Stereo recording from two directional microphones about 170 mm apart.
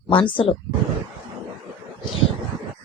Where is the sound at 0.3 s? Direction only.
30° left (ahead or behind).